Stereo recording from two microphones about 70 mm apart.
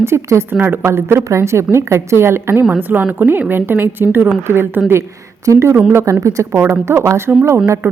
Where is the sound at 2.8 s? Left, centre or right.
Right.